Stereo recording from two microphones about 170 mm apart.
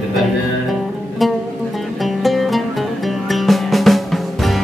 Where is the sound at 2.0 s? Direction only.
Centre (ahead or behind).